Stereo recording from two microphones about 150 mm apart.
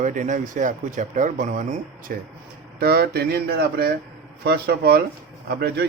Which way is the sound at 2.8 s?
90° right.